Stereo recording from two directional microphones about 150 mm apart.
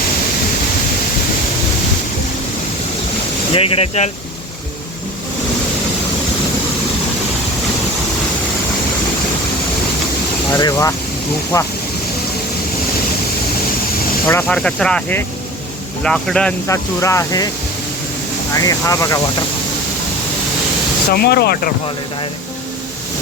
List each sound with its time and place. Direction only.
3.5 s speech: 40° left (ahead or behind)
10.5 s speech: 20° left (ahead or behind)
14.4 s speech: 5° left (ahead or behind)
16.6 s speech: 20° left (ahead or behind)
18.5 s speech: 25° left (ahead or behind)
21.1 s speech: 90° left